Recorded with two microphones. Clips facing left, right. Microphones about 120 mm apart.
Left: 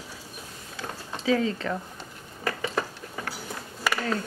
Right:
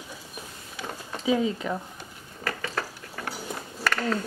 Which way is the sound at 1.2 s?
15° right (ahead or behind).